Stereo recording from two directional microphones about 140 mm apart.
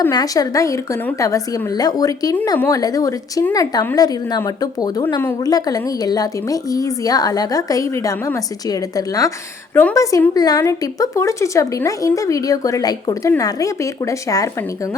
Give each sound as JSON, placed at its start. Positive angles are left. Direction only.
{"t": 0.1, "sound": "a woman's voice", "side_deg": 25}